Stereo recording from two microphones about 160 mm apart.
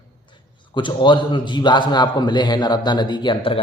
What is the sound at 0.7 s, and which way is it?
A man's voice, 30° left (ahead or behind).